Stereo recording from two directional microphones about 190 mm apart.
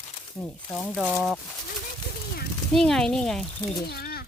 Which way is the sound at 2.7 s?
5° left (ahead or behind).